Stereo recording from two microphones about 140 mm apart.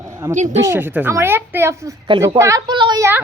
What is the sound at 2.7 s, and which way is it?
Speech, 35° right (ahead or behind).